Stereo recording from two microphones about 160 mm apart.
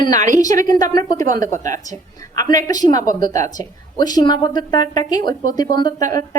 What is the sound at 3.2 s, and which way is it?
Speech, 50° right (ahead or behind).